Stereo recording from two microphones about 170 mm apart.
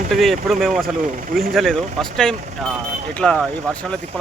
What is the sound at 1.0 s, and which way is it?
Speech, 55° right (ahead or behind).